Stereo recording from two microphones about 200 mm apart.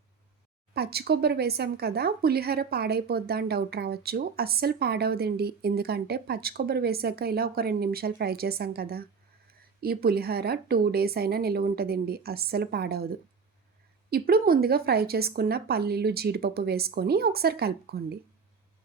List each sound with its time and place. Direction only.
0.7 s speech: 50° right (ahead or behind)